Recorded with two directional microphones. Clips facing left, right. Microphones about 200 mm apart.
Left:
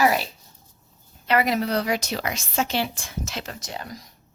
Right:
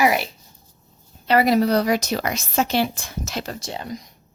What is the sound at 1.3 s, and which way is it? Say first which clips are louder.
A woman's voice: right 5 dB; 35° right (ahead or behind).